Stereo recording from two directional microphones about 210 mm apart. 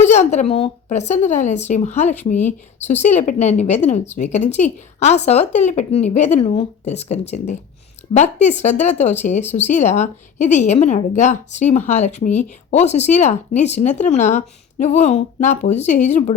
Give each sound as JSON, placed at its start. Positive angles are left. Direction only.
{"t": 0.0, "sound": "speech", "side_deg": 35}